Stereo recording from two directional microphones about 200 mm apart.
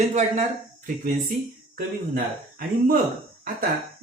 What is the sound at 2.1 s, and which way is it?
Speech, 45° right (ahead or behind).